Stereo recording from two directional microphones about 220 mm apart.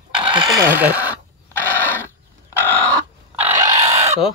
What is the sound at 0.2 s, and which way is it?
Chicken, 10° right (ahead or behind).